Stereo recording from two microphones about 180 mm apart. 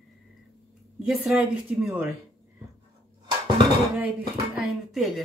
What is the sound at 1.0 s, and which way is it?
Speech, 5° right (ahead or behind).